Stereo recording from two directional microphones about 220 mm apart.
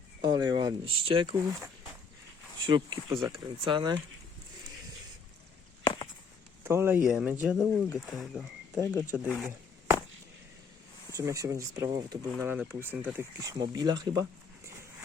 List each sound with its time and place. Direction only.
0.2 s speech: 20° right (ahead or behind)
5.8 s a sound: 20° left (ahead or behind)
6.7 s speech: 10° right (ahead or behind)
11.2 s speech: 15° right (ahead or behind)